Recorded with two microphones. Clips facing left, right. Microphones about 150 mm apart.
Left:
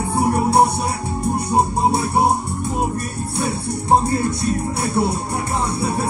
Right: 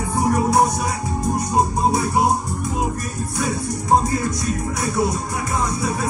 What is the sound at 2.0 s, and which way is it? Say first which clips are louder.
Music: left 1 dB; 30° left (ahead or behind).